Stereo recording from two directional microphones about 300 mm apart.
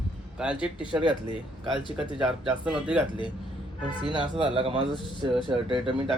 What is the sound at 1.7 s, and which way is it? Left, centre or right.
Speech, centre.